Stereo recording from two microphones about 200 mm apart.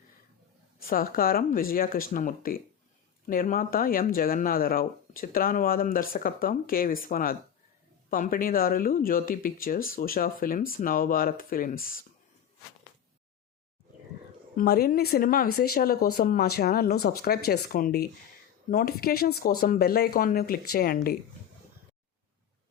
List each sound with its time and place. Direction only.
0.8 s speech: 45° left (ahead or behind)
14.5 s speech: 50° left (ahead or behind)